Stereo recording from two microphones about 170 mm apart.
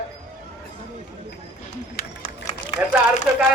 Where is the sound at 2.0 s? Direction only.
60° left (ahead or behind).